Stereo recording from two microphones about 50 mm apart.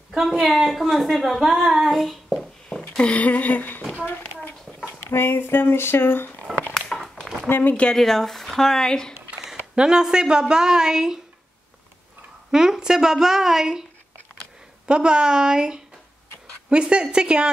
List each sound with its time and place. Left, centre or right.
0.2 s a woman's voice: centre
3.0 s a sound: left
4.8 s speech: left
6.7 s a sound: centre
7.4 s speech: left
7.9 s speech: centre
9.8 s a woman's voice: centre
12.4 s a woman's voice: centre
14.9 s a woman's voice: centre